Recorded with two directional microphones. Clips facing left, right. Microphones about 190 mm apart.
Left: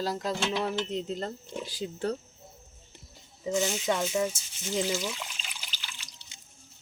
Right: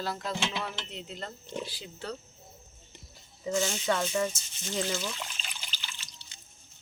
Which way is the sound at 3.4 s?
15° left (ahead or behind).